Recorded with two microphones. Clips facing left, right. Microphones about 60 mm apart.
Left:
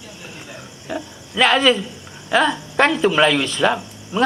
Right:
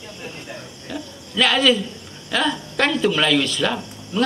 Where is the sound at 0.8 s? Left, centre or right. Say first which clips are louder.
Left 5 dB; centre.